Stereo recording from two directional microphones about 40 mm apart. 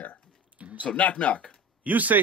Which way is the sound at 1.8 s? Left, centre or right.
Right.